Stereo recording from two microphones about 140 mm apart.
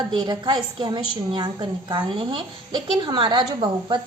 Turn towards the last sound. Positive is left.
turn(degrees=-35)  # may be behind; listen again after turning